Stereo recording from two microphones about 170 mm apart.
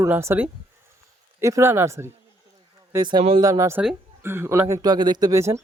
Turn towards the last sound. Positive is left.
turn(degrees=-15)  # may be behind; listen again after turning